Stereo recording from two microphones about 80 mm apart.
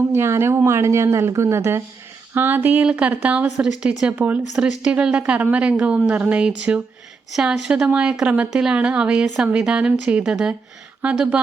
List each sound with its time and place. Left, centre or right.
0.1 s a woman's voice: right
4.5 s a woman's voice: centre